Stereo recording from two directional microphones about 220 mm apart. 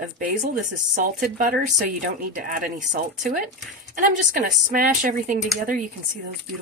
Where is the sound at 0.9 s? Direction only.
40° right (ahead or behind).